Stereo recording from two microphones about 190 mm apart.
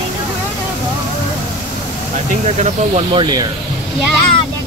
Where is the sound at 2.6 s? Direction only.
30° right (ahead or behind).